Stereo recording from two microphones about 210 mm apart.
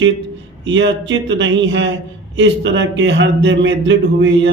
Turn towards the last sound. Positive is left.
turn(degrees=-60)  # may be behind; listen again after turning